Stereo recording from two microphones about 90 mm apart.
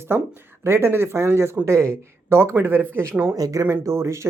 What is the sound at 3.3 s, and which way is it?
Speech, 40° right (ahead or behind).